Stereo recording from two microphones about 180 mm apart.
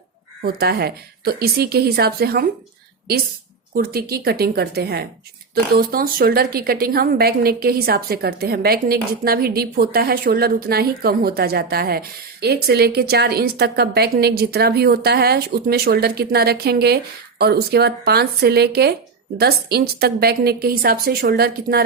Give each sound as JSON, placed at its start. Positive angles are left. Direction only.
{"t": 0.4, "sound": "a woman's voice", "side_deg": -60}
{"t": 3.8, "sound": "a woman's voice", "side_deg": -55}